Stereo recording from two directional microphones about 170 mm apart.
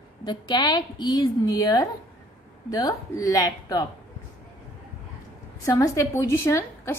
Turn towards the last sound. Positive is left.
turn(degrees=15)  # may be behind; listen again after turning